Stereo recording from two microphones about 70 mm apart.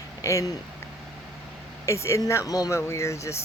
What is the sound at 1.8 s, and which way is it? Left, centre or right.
Speech, left.